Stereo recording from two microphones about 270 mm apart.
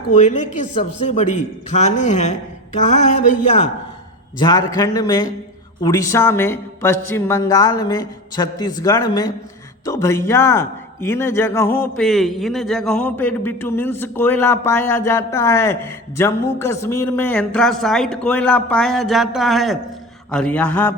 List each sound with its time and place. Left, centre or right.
0.2 s a man's voice: left
4.4 s a man's voice: centre
20.3 s mantra: centre